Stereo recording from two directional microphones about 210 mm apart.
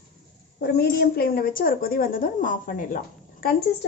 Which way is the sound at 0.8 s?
50° left (ahead or behind).